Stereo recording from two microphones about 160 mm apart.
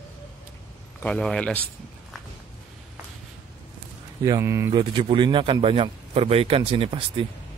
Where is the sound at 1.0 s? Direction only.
5° left (ahead or behind).